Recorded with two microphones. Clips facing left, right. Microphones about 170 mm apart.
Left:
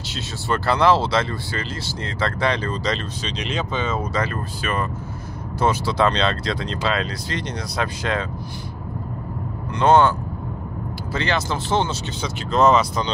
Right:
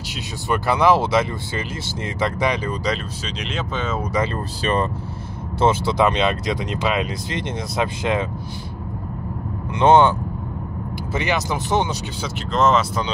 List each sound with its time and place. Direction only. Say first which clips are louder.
0.1 s speech: right 1 dB; 15° right (ahead or behind)
4.1 s speech: right 2 dB; 20° right (ahead or behind)
5.6 s speech: right 2 dB; 20° right (ahead or behind)
9.8 s speech: right 2 dB; 20° right (ahead or behind)
11.1 s speech: right 1 dB; 15° right (ahead or behind)
12.2 s speech: left 2 dB; centre (ahead or behind)